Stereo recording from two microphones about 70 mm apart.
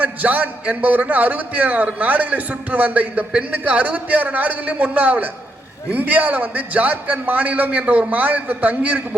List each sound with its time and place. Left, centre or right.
0.0 s a man's voice: right